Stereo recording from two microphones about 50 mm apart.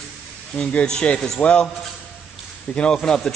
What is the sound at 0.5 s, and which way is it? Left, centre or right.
A man's voice, centre.